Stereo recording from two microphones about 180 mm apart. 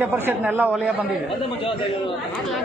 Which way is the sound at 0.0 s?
10° right (ahead or behind).